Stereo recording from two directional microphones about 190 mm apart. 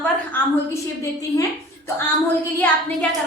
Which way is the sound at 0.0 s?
10° left (ahead or behind).